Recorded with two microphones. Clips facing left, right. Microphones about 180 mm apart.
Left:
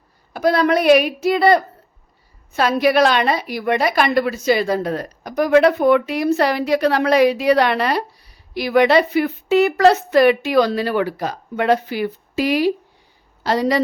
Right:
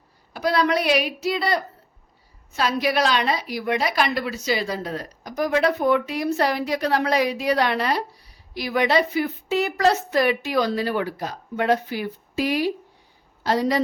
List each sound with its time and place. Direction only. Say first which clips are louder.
0.3 s a woman's voice: left 5 dB; 50° left (ahead or behind); by 13.8 s 80° left